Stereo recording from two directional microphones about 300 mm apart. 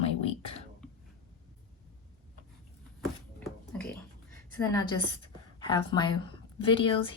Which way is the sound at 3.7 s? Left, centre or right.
Centre.